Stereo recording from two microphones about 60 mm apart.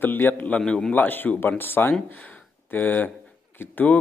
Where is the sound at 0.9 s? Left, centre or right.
Left.